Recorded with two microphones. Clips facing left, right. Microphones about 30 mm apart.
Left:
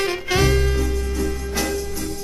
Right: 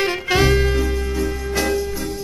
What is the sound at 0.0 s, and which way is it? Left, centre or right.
Music, centre.